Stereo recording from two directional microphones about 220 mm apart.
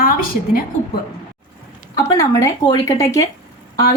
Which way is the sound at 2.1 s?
15° left (ahead or behind).